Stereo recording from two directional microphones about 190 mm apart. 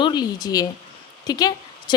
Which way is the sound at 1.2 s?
20° left (ahead or behind).